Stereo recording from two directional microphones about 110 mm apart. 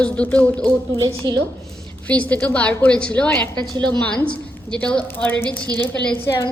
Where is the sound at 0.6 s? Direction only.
35° right (ahead or behind).